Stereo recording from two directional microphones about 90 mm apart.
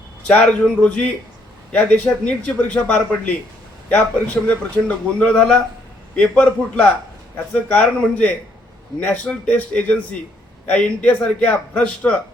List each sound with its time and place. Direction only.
0.3 s speech: 10° left (ahead or behind)
4.4 s speech: 15° left (ahead or behind)